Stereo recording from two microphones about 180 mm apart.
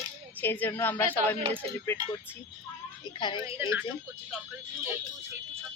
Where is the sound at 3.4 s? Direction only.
15° right (ahead or behind).